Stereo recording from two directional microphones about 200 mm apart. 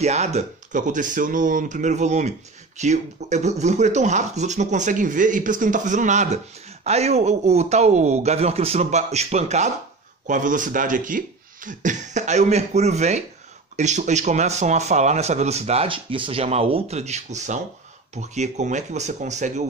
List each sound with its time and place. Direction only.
0.0 s speech: 35° right (ahead or behind)